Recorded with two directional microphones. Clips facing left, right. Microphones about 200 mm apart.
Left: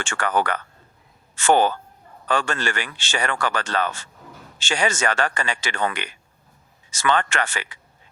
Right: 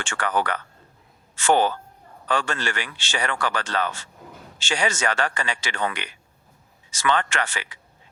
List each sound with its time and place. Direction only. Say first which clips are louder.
0.0 s a man's voice: left 2 dB; 50° left (ahead or behind)